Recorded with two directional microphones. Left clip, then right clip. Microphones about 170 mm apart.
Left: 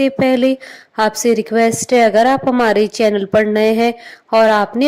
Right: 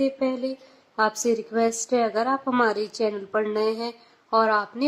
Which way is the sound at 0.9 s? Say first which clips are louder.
Left 9 dB; 35° left (ahead or behind).